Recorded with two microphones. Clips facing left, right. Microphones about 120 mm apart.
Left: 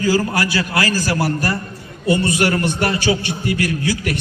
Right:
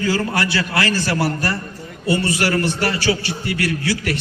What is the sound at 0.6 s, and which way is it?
A man's voice, 25° left (ahead or behind).